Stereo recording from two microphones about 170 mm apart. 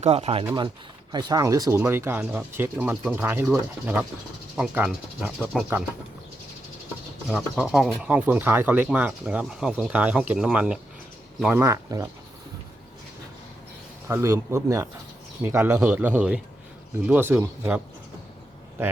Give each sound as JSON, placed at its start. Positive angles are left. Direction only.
{"t": 0.0, "sound": "speech", "side_deg": -35}
{"t": 1.1, "sound": "speech", "side_deg": -25}
{"t": 7.3, "sound": "speech", "side_deg": 0}
{"t": 14.1, "sound": "speech", "side_deg": -15}